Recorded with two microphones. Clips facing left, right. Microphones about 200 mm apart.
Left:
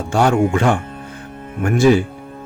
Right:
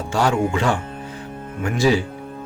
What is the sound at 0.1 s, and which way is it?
Speech, 50° left (ahead or behind).